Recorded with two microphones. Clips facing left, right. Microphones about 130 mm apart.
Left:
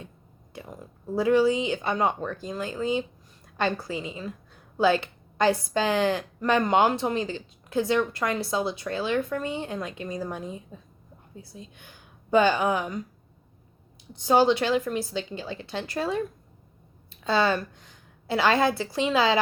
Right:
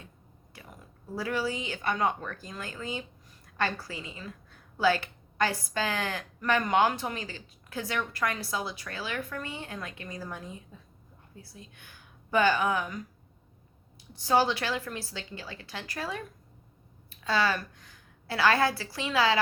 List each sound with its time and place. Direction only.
0.5 s a woman's voice: 25° left (ahead or behind)
14.1 s a woman's voice: 20° left (ahead or behind)